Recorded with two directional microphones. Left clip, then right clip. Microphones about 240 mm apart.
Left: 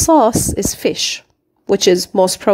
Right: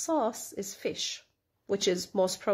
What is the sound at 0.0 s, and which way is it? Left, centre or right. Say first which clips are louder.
Speech: left 18 dB; left.